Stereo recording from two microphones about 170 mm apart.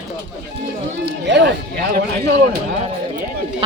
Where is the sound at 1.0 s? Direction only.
85° right.